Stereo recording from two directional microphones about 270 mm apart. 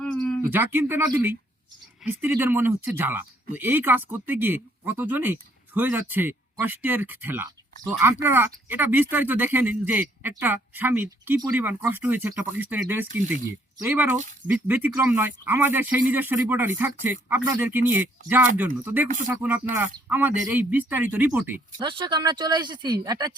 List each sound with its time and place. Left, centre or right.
0.0 s speech: centre
21.8 s speech: centre